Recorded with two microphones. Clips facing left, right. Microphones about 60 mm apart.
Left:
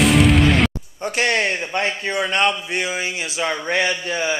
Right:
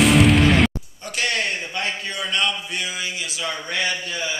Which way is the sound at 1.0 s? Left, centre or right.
Left.